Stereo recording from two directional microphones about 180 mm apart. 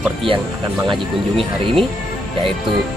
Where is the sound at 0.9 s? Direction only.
30° right (ahead or behind).